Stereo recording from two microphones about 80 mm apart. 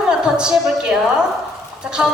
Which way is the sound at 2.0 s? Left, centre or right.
Centre.